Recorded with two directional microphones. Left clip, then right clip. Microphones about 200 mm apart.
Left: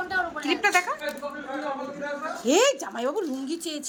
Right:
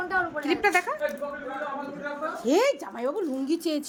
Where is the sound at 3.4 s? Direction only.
20° right (ahead or behind).